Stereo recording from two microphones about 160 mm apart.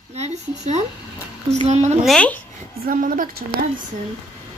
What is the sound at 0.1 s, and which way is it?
A woman's voice, 45° right (ahead or behind).